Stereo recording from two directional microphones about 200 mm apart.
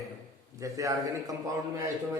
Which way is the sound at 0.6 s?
15° right (ahead or behind).